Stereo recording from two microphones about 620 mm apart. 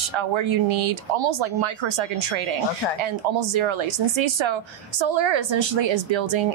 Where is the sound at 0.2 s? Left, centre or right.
Right.